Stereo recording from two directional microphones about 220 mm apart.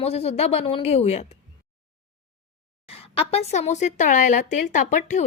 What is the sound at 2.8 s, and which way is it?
Speech, 25° left (ahead or behind).